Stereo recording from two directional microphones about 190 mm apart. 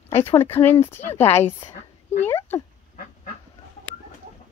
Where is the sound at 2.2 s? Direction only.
10° left (ahead or behind).